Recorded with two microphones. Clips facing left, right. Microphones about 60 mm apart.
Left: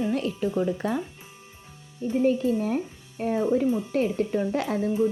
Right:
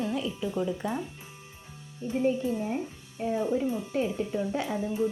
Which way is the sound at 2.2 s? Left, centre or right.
Left.